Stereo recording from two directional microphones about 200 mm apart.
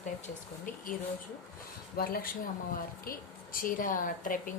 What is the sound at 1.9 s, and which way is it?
Speech, 50° left (ahead or behind).